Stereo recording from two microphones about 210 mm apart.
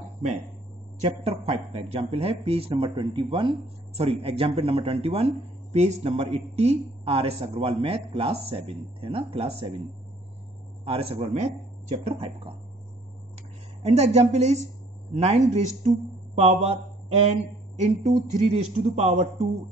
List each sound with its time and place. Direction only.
1.0 s speech: 30° right (ahead or behind)
10.9 s speech: 25° right (ahead or behind)
13.8 s speech: 30° right (ahead or behind)